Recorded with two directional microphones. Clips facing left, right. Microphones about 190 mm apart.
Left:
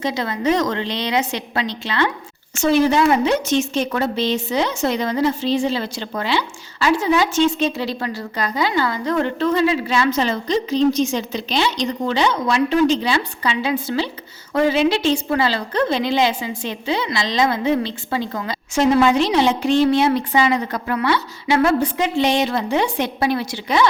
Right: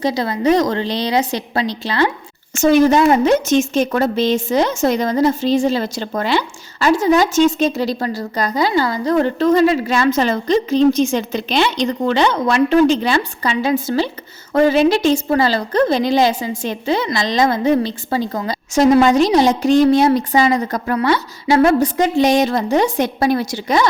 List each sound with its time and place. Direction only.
0.0 s a woman's voice: 35° right (ahead or behind)